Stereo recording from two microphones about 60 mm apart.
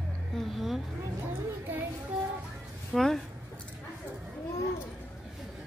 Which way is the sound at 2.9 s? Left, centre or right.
Centre.